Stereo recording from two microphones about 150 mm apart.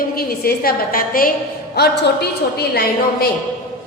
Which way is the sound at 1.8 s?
90° left.